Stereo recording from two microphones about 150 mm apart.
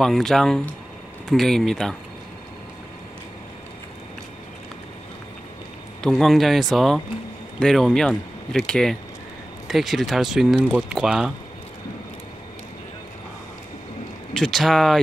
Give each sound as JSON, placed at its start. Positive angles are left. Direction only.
{"t": 0.0, "sound": "speech", "side_deg": 0}
{"t": 6.0, "sound": "speech", "side_deg": 0}
{"t": 14.3, "sound": "speech", "side_deg": 0}